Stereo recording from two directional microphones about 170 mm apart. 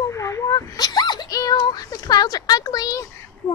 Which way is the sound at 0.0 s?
20° left (ahead or behind).